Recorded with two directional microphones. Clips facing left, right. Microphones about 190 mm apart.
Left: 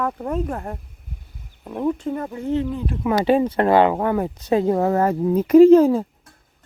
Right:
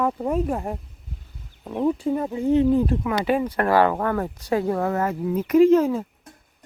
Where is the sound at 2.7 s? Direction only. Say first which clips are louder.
Right 7 dB; 40° right (ahead or behind).